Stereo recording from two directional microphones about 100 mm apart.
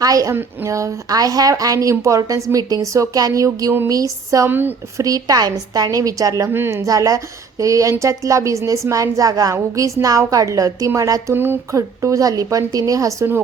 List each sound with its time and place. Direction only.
0.0 s a woman's voice: 35° right (ahead or behind)
4.4 s a woman's voice: 20° right (ahead or behind)
4.9 s a woman's voice: 35° right (ahead or behind)
6.8 s a woman's voice: 35° right (ahead or behind)
11.3 s a woman's voice: 20° right (ahead or behind)